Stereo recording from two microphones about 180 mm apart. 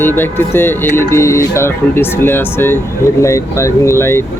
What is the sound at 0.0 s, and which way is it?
Speech, 10° left (ahead or behind).